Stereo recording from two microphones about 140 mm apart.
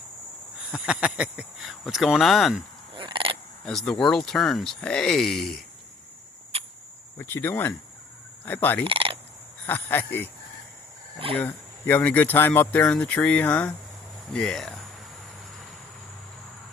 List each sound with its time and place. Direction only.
0.7 s speech: 5° right (ahead or behind)
2.9 s a sound: 35° right (ahead or behind)
3.6 s speech: centre (ahead or behind)
7.2 s speech: 15° left (ahead or behind)
8.8 s a sound: 40° right (ahead or behind)
9.6 s speech: 15° left (ahead or behind)
11.3 s speech: 15° left (ahead or behind)